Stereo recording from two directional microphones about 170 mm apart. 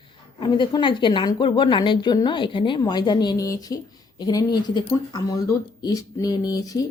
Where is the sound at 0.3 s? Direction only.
30° left (ahead or behind).